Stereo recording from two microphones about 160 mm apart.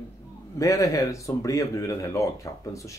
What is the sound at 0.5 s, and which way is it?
Speech, 20° left (ahead or behind).